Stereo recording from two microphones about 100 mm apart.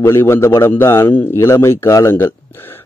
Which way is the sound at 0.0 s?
25° left (ahead or behind).